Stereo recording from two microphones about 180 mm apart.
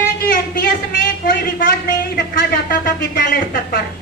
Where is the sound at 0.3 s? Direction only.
55° left (ahead or behind).